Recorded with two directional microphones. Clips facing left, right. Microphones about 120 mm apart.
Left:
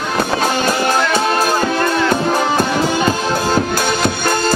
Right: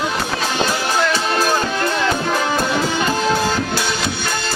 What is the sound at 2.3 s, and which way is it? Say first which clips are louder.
Music: left 3 dB; 35° left (ahead or behind).